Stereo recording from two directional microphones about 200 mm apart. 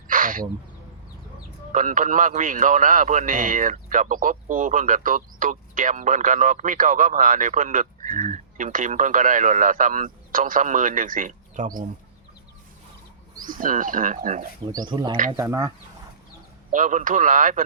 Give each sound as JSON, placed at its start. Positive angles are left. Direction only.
{"t": 0.1, "sound": "a sound", "side_deg": -45}
{"t": 1.7, "sound": "a man's voice", "side_deg": -40}
{"t": 13.4, "sound": "speech", "side_deg": -45}
{"t": 14.7, "sound": "speech", "side_deg": -20}
{"t": 16.7, "sound": "a man's voice", "side_deg": -40}